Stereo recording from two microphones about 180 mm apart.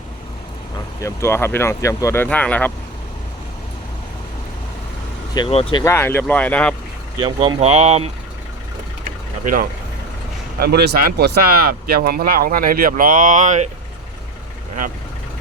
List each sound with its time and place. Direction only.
1.0 s speech: 15° left (ahead or behind)
5.5 s speech: 35° left (ahead or behind)
5.8 s speech: 15° left (ahead or behind)
7.2 s speech: 25° right (ahead or behind)
10.6 s speech: 60° right (ahead or behind); by 13.7 s 40° right (ahead or behind)